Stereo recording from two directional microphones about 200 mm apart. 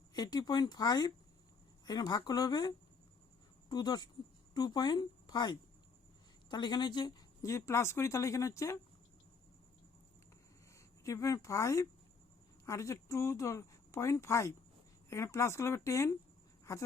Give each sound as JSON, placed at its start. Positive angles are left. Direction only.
{"t": 0.1, "sound": "a woman's voice", "side_deg": 20}
{"t": 11.0, "sound": "speech", "side_deg": 15}